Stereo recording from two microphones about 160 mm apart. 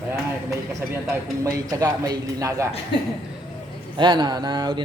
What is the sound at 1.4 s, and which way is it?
A man's voice, 20° right (ahead or behind).